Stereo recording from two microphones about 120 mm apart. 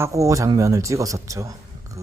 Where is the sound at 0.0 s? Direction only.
25° right (ahead or behind).